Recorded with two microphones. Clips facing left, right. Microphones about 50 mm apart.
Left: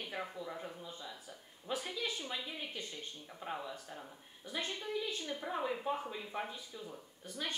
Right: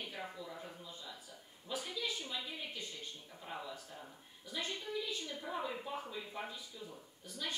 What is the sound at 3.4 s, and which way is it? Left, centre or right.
Speech, left.